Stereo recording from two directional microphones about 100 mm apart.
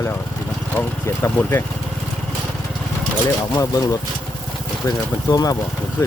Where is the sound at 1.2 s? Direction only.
25° left (ahead or behind).